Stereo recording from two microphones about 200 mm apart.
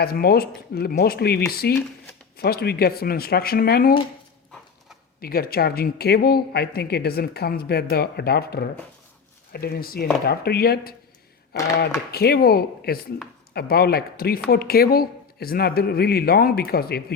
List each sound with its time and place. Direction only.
0.0 s speech: 50° left (ahead or behind)
5.2 s speech: 50° left (ahead or behind)